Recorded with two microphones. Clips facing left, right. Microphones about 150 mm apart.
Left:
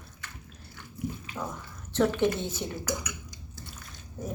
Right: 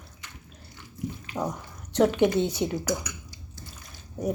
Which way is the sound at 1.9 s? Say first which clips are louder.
Right 4 dB; 15° right (ahead or behind).